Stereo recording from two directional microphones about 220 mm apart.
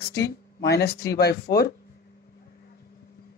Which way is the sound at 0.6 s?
45° left (ahead or behind).